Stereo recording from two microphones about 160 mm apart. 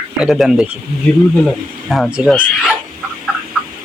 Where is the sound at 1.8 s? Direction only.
Centre (ahead or behind).